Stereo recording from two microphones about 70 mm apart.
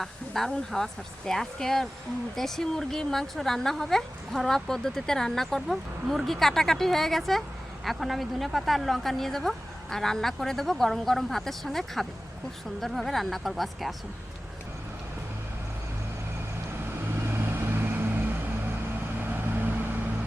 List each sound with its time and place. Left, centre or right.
0.0 s a woman's voice: centre
17.2 s vehicle: right